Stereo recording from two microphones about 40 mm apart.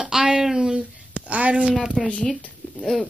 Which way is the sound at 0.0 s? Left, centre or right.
Centre.